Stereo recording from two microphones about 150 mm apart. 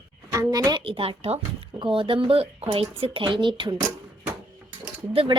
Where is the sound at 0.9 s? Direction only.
35° right (ahead or behind).